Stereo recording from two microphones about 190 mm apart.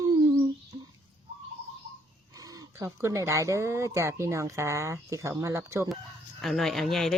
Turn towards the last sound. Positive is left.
turn(degrees=0)  # may be behind; listen again after turning